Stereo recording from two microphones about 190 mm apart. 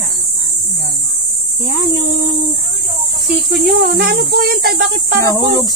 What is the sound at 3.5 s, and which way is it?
Speech, 55° right (ahead or behind).